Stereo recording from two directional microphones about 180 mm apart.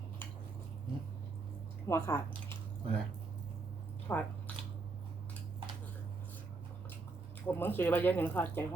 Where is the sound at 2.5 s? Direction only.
30° right (ahead or behind).